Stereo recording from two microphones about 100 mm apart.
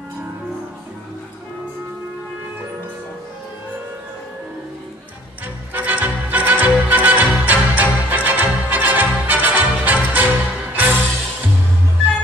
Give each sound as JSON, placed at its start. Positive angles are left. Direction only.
{"t": 5.7, "sound": "music", "side_deg": -15}